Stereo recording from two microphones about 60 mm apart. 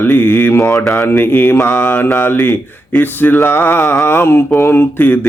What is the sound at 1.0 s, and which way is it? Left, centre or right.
Mantra, left.